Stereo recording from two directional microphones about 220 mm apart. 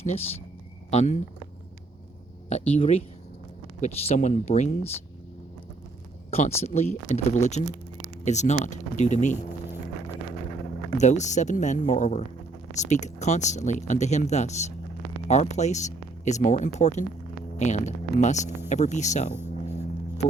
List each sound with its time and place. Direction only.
0.0 s speech: 30° left (ahead or behind)
2.5 s speech: 30° left (ahead or behind)
6.3 s speech: 30° left (ahead or behind)
10.9 s speech: 30° left (ahead or behind)